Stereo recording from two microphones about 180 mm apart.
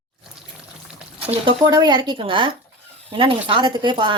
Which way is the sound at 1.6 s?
25° right (ahead or behind).